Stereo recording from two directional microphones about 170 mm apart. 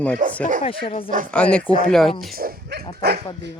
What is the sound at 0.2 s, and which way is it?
Speech, 50° right (ahead or behind).